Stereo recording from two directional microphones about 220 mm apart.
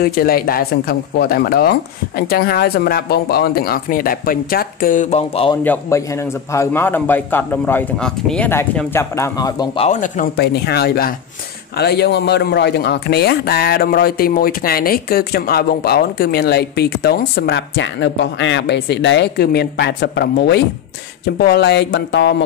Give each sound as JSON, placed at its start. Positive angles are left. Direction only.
{"t": 0.0, "sound": "a man's voice", "side_deg": 45}
{"t": 5.6, "sound": "a man's voice", "side_deg": 10}
{"t": 9.8, "sound": "speech", "side_deg": 35}
{"t": 10.3, "sound": "a man's voice", "side_deg": 45}